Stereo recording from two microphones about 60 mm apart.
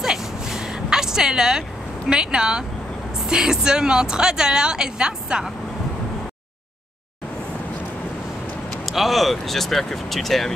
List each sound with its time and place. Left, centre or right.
0.0 s a sound: centre
2.0 s a woman's voice: centre
8.6 s speech: centre